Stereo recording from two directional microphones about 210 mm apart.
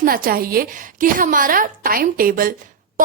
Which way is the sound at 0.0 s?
45° right (ahead or behind).